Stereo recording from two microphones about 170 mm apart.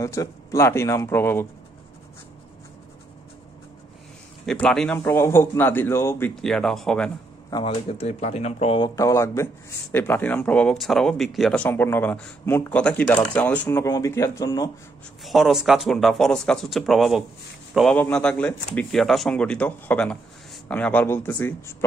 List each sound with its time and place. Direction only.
0.0 s speech: 20° left (ahead or behind)
4.5 s speech: 5° left (ahead or behind)
4.9 s speech: 15° left (ahead or behind)
6.4 s speech: 5° left (ahead or behind)
7.5 s speech: 35° left (ahead or behind); by 14.7 s 20° left (ahead or behind)
15.2 s speech: centre (ahead or behind)